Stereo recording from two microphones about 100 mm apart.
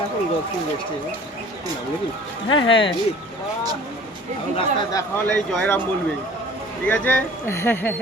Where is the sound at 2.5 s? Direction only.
55° left (ahead or behind).